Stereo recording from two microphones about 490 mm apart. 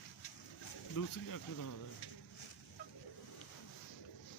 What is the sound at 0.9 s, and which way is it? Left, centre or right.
Speech, left.